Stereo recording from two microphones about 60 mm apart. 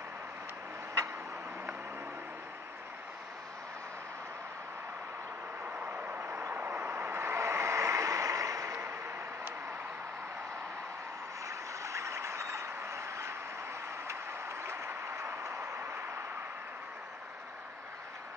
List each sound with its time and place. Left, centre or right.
5.9 s vehicle: right
11.4 s vehicle: right
14.0 s a sound: right